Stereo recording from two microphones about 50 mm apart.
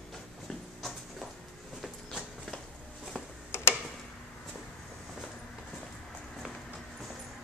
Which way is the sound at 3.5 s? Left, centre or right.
Left.